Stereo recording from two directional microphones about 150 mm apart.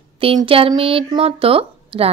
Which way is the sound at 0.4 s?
35° right (ahead or behind).